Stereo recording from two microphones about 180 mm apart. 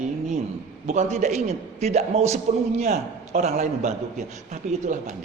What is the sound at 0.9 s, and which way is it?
A man's voice, 40° right (ahead or behind).